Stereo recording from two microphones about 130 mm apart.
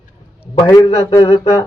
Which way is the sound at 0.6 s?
25° left (ahead or behind).